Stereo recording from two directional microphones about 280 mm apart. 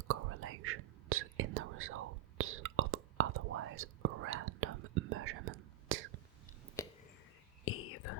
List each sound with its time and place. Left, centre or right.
0.1 s whispering: right
6.8 s whispering: centre
7.6 s whispering: left